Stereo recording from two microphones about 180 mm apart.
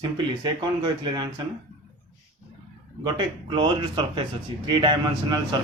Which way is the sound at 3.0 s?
25° right (ahead or behind).